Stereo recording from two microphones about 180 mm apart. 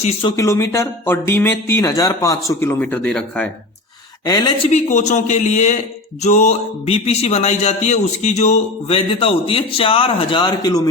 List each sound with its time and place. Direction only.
0.0 s speech: 30° left (ahead or behind)
0.3 s speech: 15° left (ahead or behind)
4.3 s speech: 20° left (ahead or behind)
4.6 s speech: 40° left (ahead or behind); by 10.8 s 20° left (ahead or behind)